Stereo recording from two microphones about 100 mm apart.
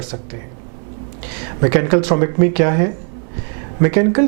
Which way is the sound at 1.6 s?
15° right (ahead or behind).